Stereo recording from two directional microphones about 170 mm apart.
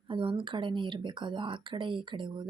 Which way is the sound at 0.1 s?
30° right (ahead or behind).